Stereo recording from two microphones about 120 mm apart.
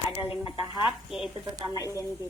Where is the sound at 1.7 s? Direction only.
25° left (ahead or behind).